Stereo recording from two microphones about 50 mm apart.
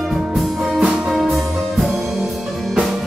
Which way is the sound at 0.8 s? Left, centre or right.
Right.